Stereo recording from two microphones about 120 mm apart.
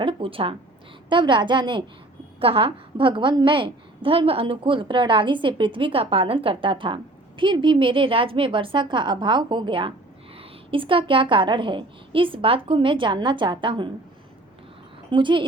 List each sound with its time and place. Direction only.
0.0 s a woman's voice: 45° right (ahead or behind)
15.1 s a woman's voice: 45° right (ahead or behind)